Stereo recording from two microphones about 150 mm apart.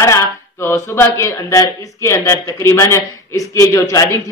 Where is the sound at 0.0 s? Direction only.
15° left (ahead or behind).